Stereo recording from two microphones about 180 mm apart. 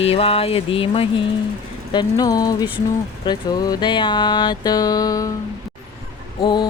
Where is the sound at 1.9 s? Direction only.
25° left (ahead or behind).